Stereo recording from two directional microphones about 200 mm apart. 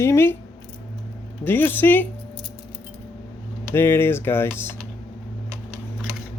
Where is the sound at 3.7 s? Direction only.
10° left (ahead or behind).